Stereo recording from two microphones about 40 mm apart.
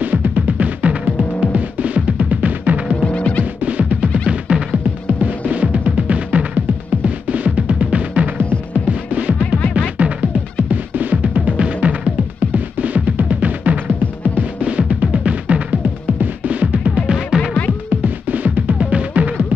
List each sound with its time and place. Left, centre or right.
0.0 s music: right
0.5 s music: right
3.0 s music: left
3.6 s music: right
5.0 s music: right
9.8 s music: right
10.7 s music: right
12.4 s music: right
17.3 s music: right
18.0 s music: right